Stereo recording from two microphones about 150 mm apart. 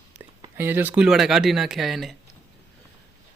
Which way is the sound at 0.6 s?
15° right (ahead or behind).